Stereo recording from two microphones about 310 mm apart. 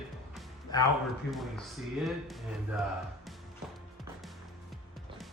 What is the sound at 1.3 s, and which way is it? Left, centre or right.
Speech, centre.